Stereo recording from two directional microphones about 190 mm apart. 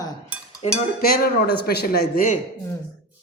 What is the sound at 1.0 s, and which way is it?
Speech, 50° left (ahead or behind).